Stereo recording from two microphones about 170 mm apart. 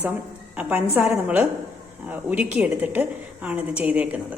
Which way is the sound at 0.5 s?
10° right (ahead or behind).